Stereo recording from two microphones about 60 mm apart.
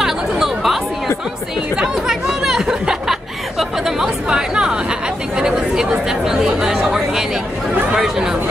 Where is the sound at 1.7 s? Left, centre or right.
Centre.